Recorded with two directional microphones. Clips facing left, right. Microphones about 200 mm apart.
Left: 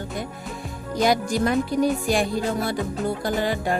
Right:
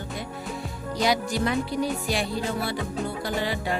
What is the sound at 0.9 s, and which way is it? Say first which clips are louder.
Music: left 4 dB; 50° left (ahead or behind).